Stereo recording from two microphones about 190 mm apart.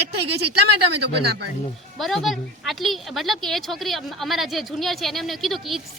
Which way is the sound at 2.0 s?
Centre (ahead or behind).